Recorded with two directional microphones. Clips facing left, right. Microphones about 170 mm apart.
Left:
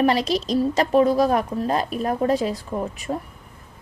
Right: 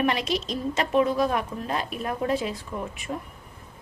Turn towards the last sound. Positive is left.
turn(degrees=35)  # may be behind; listen again after turning